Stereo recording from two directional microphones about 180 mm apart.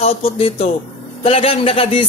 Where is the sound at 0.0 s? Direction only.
35° left (ahead or behind).